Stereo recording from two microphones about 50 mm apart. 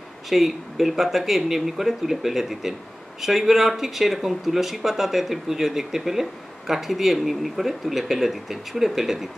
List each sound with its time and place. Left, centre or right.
0.3 s speech: centre